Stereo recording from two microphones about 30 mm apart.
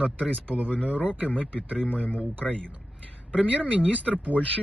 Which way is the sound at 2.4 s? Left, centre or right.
Left.